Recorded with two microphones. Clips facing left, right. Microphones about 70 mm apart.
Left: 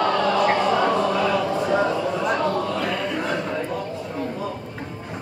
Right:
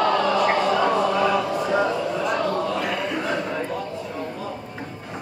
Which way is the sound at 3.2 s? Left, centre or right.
Centre.